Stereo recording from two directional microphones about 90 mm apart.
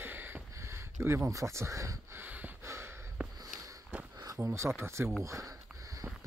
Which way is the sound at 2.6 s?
30° right (ahead or behind).